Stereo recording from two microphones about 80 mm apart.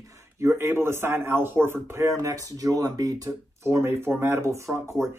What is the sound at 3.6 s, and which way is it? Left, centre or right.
Speech, right.